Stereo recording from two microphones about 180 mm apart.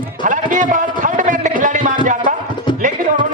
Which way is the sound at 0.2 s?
45° right (ahead or behind).